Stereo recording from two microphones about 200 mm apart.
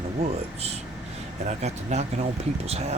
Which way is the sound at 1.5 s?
35° right (ahead or behind).